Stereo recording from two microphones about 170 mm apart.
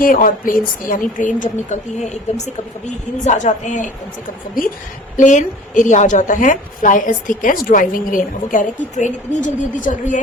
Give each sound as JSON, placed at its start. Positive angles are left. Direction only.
{"t": 0.0, "sound": "a woman's voice", "side_deg": 55}
{"t": 5.1, "sound": "a woman's voice", "side_deg": 45}